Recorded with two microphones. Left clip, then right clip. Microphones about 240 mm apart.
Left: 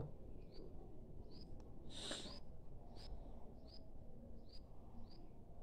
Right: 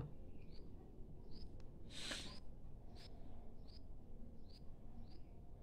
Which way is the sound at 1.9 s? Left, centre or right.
Right.